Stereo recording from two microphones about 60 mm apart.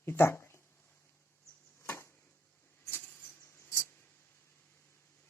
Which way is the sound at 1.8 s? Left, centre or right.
Left.